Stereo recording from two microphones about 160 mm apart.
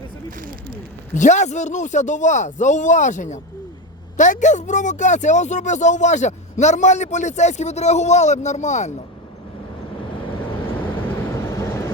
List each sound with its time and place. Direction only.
0.3 s a sound: 55° right (ahead or behind)
1.1 s speech: 50° left (ahead or behind)
10.8 s vehicle: 10° left (ahead or behind)